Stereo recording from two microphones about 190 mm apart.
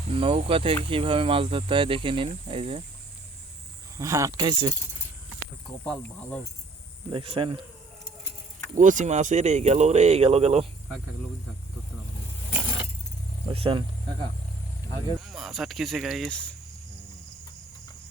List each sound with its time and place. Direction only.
0.1 s speech: 30° right (ahead or behind)
3.9 s speech: 15° right (ahead or behind)
5.8 s speech: 5° left (ahead or behind)
7.1 s speech: 30° right (ahead or behind)
8.7 s speech: 40° right (ahead or behind)
13.5 s speech: 30° right (ahead or behind)
15.2 s speech: centre (ahead or behind)